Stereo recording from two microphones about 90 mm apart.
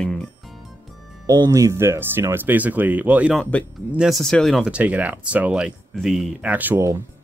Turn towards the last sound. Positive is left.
turn(degrees=-20)  # may be behind; listen again after turning